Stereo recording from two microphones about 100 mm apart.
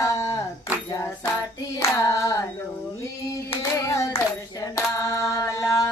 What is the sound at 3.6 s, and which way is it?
Hands, 30° left (ahead or behind).